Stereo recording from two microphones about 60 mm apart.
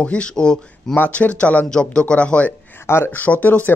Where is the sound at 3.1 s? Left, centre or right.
Left.